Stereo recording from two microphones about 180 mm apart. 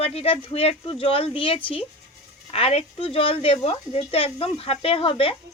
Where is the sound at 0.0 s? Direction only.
35° left (ahead or behind).